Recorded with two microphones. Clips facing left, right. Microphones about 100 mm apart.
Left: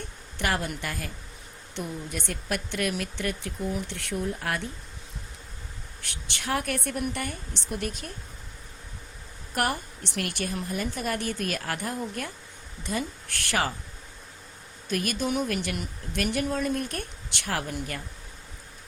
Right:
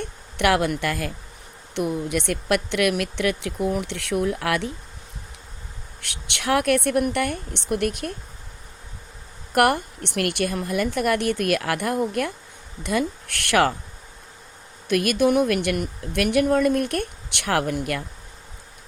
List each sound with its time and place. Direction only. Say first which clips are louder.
0.3 s speech: right 9 dB; 85° right
1.7 s speech: right 10 dB; 70° right (ahead or behind)
6.0 s speech: right 4 dB; 70° right (ahead or behind)
9.5 s speech: right 9 dB; 65° right (ahead or behind)
14.8 s speech: right 9 dB; 70° right (ahead or behind)